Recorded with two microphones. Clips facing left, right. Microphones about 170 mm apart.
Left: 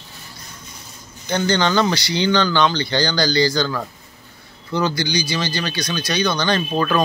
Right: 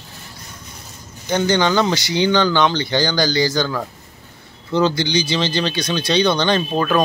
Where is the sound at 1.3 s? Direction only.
15° right (ahead or behind).